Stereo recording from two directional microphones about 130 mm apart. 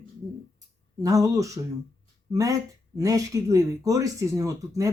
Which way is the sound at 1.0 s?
25° right (ahead or behind).